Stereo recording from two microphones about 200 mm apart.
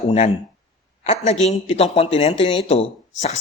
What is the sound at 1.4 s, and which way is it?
A man's voice, 30° left (ahead or behind).